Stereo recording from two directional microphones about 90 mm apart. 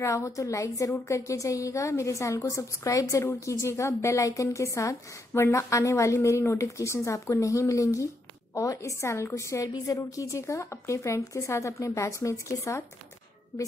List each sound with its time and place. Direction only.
0.0 s a woman's voice: 35° left (ahead or behind)